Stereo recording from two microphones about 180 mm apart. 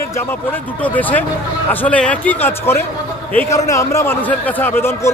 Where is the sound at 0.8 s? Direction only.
10° left (ahead or behind).